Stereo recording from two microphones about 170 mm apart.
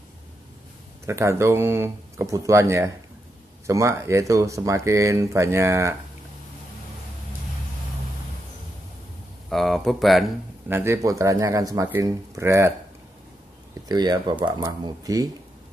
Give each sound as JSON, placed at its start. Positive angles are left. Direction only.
{"t": 1.0, "sound": "speech", "side_deg": -15}
{"t": 9.5, "sound": "speech", "side_deg": 0}
{"t": 10.7, "sound": "speech", "side_deg": -15}
{"t": 13.8, "sound": "speech", "side_deg": -25}